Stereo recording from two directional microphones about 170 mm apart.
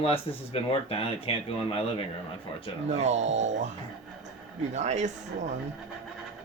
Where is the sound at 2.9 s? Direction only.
40° right (ahead or behind).